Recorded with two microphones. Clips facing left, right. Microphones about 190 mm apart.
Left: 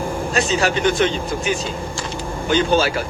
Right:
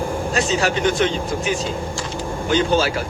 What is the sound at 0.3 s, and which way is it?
Speech, 65° left (ahead or behind).